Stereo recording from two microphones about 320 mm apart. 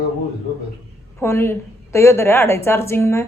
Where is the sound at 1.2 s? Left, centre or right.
Centre.